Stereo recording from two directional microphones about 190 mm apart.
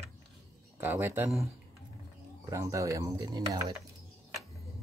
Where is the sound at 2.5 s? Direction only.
15° right (ahead or behind).